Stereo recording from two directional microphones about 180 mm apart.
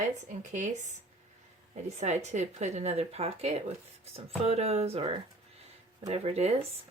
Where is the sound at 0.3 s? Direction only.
45° right (ahead or behind).